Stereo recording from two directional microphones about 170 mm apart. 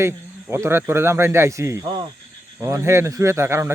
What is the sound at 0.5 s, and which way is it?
A man's voice, 15° right (ahead or behind).